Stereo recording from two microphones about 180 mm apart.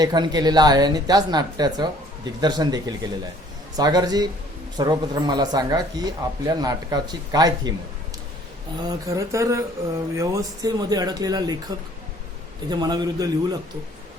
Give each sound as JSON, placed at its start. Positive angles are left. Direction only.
{"t": 0.0, "sound": "speech", "side_deg": -25}
{"t": 8.8, "sound": "speech", "side_deg": -20}
{"t": 12.7, "sound": "speech", "side_deg": -20}